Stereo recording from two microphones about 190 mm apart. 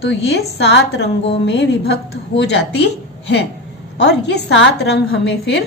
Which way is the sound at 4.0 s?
60° left (ahead or behind).